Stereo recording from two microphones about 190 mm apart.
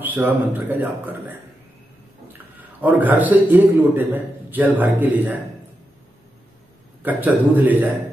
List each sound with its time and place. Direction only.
0.0 s a man's voice: 10° right (ahead or behind)
2.3 s a man's voice: 10° right (ahead or behind)
7.0 s a man's voice: 10° right (ahead or behind)